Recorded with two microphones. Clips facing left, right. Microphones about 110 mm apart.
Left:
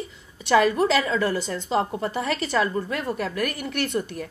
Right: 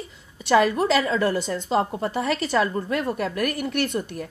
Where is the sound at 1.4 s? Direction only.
15° right (ahead or behind).